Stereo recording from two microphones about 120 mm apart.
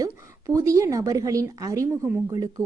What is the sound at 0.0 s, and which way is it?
A woman's voice, 25° right (ahead or behind).